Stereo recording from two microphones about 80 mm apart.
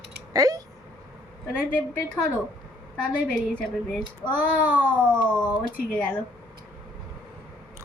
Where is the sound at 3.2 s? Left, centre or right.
Centre.